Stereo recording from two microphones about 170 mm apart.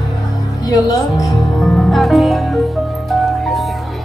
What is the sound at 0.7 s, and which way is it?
Music, 20° left (ahead or behind).